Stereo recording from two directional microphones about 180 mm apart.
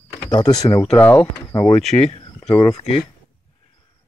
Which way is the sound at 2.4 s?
35° left (ahead or behind).